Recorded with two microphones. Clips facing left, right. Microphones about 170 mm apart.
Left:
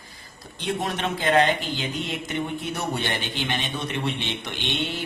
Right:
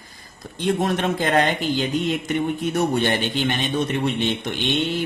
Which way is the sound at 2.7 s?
45° right (ahead or behind).